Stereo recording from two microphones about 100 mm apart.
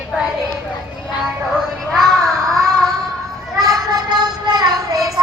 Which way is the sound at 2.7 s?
Centre (ahead or behind).